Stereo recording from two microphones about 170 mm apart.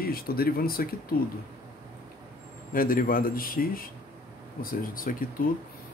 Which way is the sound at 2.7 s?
55° left (ahead or behind).